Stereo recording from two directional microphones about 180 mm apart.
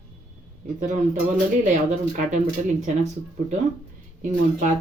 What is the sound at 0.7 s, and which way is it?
A woman's voice, 45° right (ahead or behind).